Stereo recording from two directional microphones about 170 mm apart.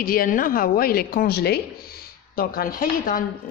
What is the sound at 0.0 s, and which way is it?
A woman's voice, 60° left (ahead or behind).